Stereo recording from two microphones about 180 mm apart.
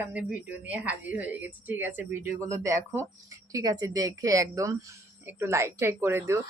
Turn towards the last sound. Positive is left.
turn(degrees=-15)  # may be behind; listen again after turning